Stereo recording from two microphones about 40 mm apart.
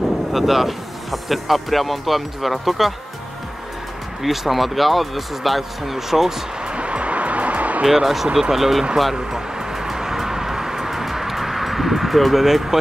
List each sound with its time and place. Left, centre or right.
0.3 s speech: centre
4.2 s speech: centre
6.6 s music: right
7.8 s speech: centre
9.1 s vehicle: centre